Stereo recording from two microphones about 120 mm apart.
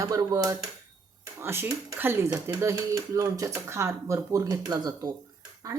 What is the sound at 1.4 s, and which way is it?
Speech, 20° right (ahead or behind).